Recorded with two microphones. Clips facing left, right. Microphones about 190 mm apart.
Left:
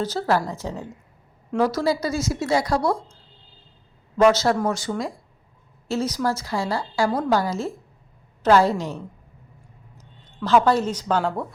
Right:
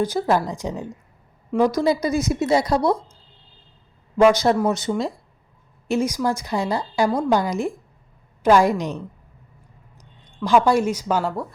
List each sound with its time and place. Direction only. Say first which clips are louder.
0.0 s a woman's voice: right 2 dB; 15° right (ahead or behind)
4.2 s a woman's voice: right 2 dB; 15° right (ahead or behind)